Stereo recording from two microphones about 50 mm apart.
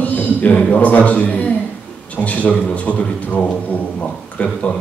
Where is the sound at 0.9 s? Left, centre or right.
Left.